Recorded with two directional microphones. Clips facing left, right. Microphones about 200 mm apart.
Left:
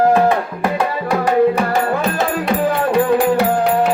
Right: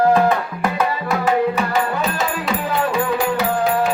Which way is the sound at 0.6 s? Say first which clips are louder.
Left 2 dB; 30° left (ahead or behind).